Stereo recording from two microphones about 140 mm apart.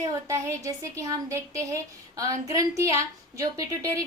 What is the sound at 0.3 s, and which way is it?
Speech, 20° right (ahead or behind).